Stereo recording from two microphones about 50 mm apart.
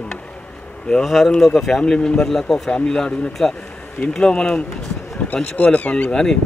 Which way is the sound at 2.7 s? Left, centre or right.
Centre.